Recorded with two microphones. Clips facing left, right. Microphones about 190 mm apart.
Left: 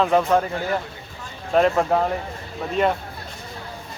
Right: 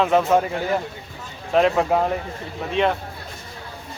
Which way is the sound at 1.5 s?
Centre (ahead or behind).